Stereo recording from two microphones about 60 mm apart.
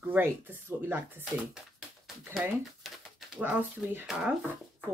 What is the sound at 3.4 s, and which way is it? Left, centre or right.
Speech, right.